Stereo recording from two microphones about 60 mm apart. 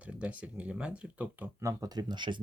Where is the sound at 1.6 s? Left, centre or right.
Right.